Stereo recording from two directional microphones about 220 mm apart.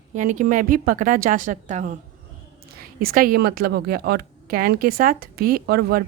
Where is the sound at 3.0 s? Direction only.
40° right (ahead or behind).